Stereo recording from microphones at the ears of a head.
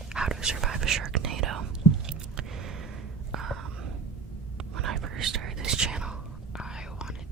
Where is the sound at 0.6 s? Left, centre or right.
Right.